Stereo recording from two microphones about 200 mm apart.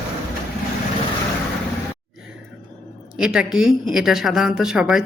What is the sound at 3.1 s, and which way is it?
A woman's voice, 5° right (ahead or behind).